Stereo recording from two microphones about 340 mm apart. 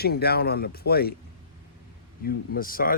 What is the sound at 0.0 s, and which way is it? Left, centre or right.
Speech, left.